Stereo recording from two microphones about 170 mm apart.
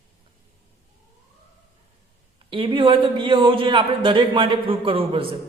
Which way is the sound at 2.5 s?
30° right (ahead or behind).